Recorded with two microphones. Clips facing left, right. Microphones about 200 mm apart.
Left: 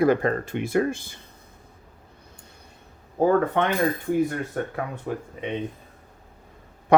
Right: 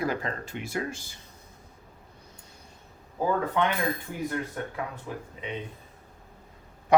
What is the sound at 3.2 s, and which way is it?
Speech, 60° left (ahead or behind).